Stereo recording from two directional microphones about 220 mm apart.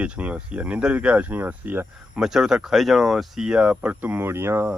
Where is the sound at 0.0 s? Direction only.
5° right (ahead or behind).